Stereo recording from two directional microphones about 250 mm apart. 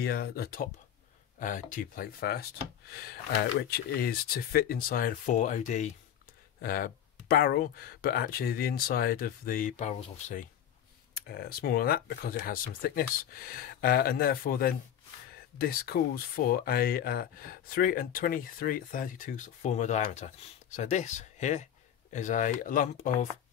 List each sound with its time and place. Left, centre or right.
0.0 s speech: left